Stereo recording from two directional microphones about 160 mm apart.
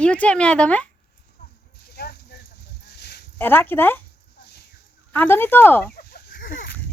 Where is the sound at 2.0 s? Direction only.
90° left.